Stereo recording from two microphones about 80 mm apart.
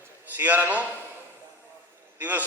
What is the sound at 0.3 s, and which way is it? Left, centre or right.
Speech, right.